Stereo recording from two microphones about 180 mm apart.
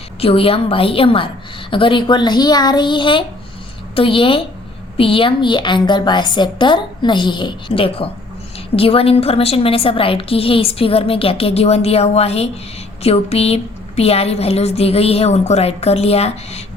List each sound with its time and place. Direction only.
0.2 s a woman's voice: 30° left (ahead or behind)